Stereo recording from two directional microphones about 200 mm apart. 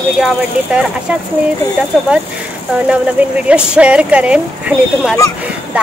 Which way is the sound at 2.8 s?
5° right (ahead or behind).